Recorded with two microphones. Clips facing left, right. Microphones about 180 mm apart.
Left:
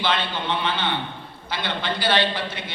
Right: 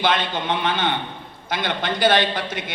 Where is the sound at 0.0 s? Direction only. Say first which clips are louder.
Right 3 dB; 50° right (ahead or behind).